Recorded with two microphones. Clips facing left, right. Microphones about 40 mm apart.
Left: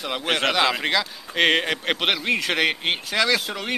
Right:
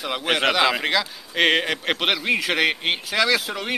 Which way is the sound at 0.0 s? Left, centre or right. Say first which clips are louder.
Right 2 dB; centre.